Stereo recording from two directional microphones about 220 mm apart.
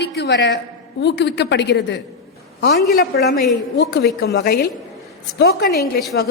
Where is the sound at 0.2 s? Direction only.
50° left (ahead or behind).